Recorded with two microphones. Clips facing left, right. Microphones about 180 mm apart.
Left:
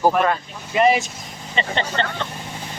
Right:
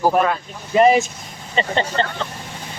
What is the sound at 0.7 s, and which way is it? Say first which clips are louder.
Speech: right 3 dB; 40° right (ahead or behind).